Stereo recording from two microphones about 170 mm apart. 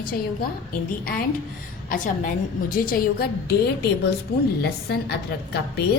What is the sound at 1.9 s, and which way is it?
A woman's voice, 55° left (ahead or behind).